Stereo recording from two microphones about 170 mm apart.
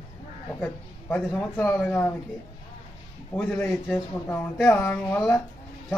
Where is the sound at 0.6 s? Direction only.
10° left (ahead or behind).